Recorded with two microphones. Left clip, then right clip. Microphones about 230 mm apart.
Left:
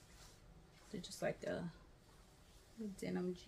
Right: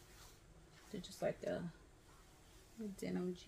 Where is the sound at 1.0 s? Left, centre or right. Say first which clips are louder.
Right 1 dB; centre.